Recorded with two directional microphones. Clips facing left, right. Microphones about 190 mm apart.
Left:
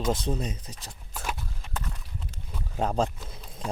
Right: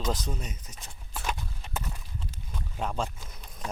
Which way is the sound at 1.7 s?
5° right (ahead or behind).